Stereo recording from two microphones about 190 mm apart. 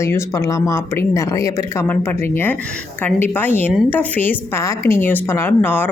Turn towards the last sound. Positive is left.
turn(degrees=10)  # may be behind; listen again after turning